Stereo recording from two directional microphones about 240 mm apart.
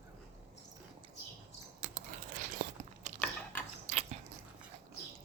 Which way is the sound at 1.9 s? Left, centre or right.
Right.